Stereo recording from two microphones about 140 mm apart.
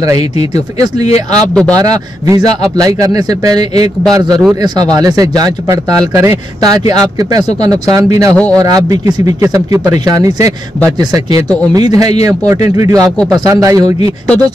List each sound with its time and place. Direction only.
1.5 s speech: 5° left (ahead or behind)
1.8 s a man's voice: 25° right (ahead or behind)
11.7 s a man's voice: 25° right (ahead or behind)